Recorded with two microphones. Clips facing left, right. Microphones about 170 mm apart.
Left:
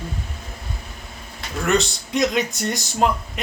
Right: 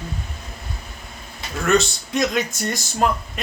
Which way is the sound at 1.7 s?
20° left (ahead or behind).